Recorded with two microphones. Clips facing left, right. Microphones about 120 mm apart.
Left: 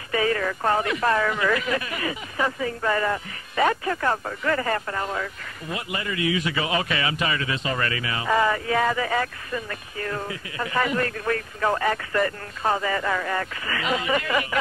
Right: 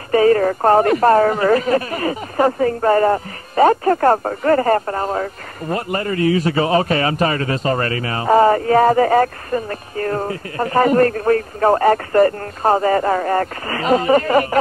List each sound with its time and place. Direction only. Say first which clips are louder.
0.1 s speech: right 11 dB; 40° right (ahead or behind)